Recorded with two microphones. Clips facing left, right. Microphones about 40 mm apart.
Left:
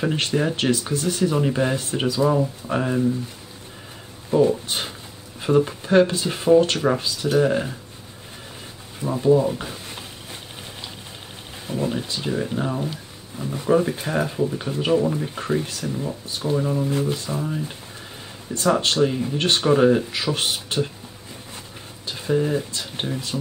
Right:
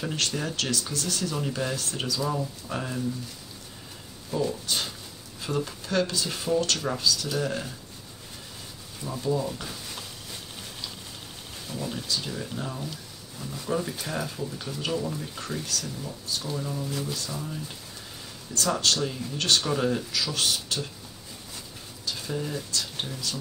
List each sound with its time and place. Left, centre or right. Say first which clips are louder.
0.0 s speech: left 8 dB; left
4.3 s speech: left 10 dB; left
9.0 s speech: left 10 dB; left
11.6 s speech: left 9 dB; left
22.0 s speech: left 10 dB; left